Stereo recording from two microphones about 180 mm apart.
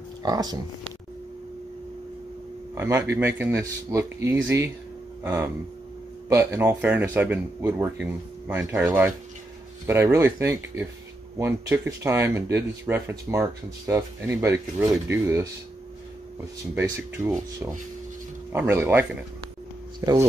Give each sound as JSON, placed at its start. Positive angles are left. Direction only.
{"t": 0.2, "sound": "speech", "side_deg": -20}
{"t": 2.7, "sound": "speech", "side_deg": -15}
{"t": 17.2, "sound": "speech", "side_deg": -15}
{"t": 18.5, "sound": "speech", "side_deg": -10}